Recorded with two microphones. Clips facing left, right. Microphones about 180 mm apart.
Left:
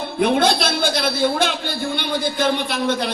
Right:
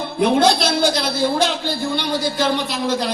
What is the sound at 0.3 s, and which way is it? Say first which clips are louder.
A man's voice: right 2 dB; 55° left (ahead or behind).